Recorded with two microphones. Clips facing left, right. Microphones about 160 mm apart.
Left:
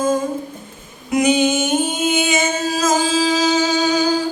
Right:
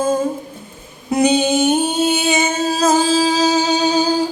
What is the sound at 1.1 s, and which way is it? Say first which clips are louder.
Music: right 1 dB; 35° right (ahead or behind).